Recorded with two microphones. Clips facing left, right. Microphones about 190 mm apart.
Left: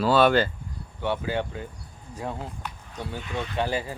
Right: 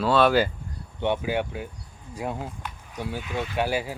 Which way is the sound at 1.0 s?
15° right (ahead or behind).